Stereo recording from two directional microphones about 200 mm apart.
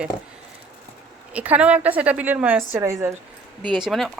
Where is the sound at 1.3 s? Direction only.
5° right (ahead or behind).